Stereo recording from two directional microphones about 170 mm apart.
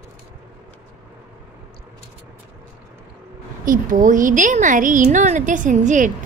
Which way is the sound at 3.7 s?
50° right (ahead or behind).